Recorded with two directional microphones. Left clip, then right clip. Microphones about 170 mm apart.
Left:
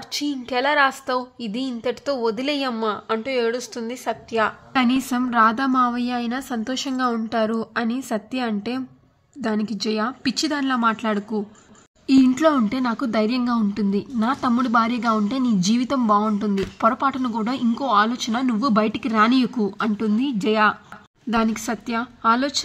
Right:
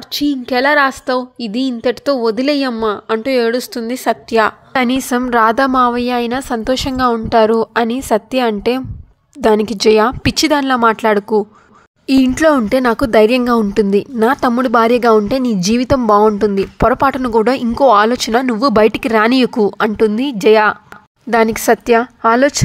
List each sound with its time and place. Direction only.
0.1 s a woman's voice: 30° right (ahead or behind)